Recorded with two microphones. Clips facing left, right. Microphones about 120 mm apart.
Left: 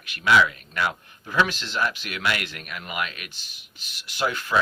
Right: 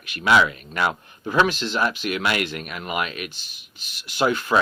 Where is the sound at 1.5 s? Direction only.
20° right (ahead or behind).